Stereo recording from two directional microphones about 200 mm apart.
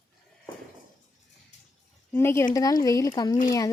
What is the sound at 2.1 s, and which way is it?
Speech, 10° left (ahead or behind).